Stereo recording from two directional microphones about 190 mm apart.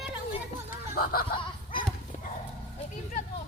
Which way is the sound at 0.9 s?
50° left (ahead or behind).